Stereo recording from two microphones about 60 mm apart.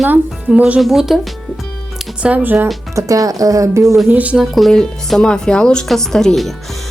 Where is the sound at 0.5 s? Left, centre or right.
Centre.